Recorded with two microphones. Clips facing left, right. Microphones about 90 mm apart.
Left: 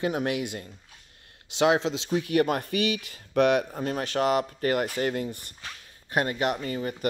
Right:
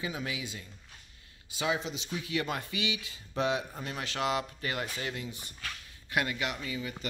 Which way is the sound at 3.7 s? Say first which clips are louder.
Left 9 dB; 45° left (ahead or behind).